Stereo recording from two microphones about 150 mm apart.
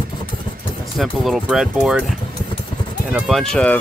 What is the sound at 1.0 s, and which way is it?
Speech, centre (ahead or behind).